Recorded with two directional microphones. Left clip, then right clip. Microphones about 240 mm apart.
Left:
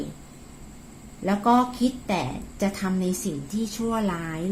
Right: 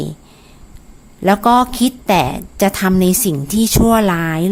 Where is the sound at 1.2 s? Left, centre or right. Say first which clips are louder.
Right 10 dB; right.